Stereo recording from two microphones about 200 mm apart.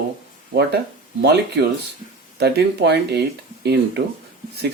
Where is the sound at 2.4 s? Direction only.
55° right (ahead or behind).